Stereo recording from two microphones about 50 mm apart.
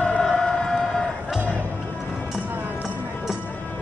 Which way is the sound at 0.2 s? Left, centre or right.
Centre.